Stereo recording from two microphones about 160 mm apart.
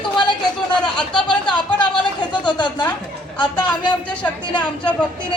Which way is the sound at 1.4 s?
30° left (ahead or behind).